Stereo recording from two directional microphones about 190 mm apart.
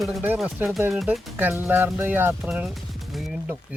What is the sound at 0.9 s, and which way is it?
Speech, centre (ahead or behind).